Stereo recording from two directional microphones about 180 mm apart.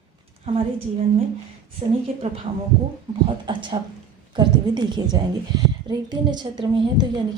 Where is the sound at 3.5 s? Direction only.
25° right (ahead or behind).